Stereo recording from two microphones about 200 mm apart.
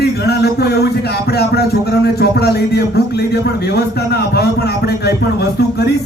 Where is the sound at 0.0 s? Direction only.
55° left (ahead or behind).